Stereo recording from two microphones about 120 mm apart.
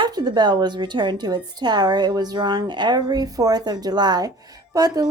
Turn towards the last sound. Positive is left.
turn(degrees=-30)  # may be behind; listen again after turning